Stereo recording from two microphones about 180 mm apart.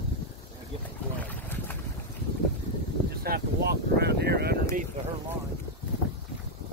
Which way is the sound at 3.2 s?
60° right (ahead or behind).